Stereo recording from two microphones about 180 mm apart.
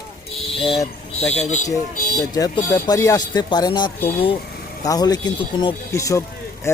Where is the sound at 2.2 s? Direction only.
20° left (ahead or behind).